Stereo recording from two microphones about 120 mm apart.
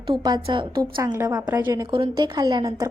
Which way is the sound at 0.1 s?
35° right (ahead or behind).